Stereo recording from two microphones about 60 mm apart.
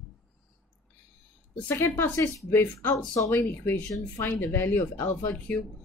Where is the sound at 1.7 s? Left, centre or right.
Left.